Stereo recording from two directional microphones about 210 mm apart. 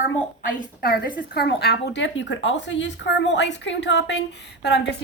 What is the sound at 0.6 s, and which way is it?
A woman's voice, 45° left (ahead or behind).